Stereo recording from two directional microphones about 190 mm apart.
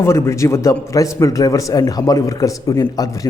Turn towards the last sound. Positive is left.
turn(degrees=20)  # may be behind; listen again after turning